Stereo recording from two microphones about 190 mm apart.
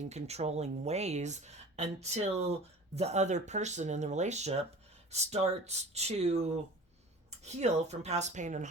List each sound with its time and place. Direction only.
0.0 s speech: 35° right (ahead or behind)